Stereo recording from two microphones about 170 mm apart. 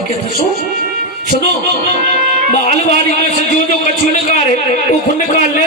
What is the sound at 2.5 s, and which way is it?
Music, 45° left (ahead or behind).